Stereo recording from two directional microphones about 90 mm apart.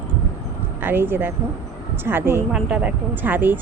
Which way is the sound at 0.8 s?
25° right (ahead or behind).